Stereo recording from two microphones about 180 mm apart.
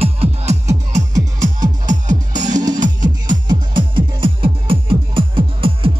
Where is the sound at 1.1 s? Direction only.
20° right (ahead or behind).